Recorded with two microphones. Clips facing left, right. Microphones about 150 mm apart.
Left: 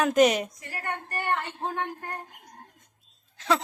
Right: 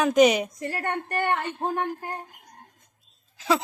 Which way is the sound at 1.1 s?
60° right (ahead or behind).